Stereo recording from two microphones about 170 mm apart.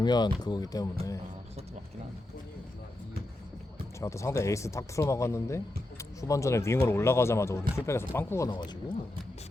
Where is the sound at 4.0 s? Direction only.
15° left (ahead or behind).